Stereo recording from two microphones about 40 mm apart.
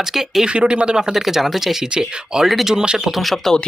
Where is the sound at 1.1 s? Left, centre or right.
Centre.